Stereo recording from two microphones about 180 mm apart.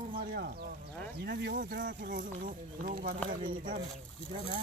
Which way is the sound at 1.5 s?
50° right (ahead or behind).